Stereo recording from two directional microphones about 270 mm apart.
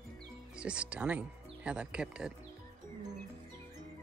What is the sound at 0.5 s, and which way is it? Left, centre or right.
Speech, centre.